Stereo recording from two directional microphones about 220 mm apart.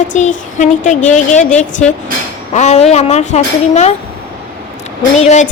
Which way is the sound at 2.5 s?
30° left (ahead or behind).